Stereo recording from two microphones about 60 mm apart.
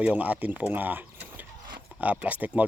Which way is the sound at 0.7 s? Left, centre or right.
Right.